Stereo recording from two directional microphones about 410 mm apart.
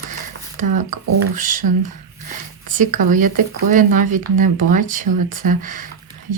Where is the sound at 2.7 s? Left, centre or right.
Centre.